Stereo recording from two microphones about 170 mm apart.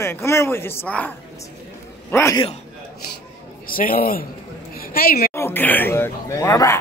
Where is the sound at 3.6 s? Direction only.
55° left (ahead or behind).